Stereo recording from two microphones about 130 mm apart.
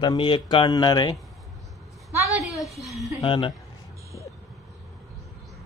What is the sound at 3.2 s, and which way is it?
Speech, 40° left (ahead or behind).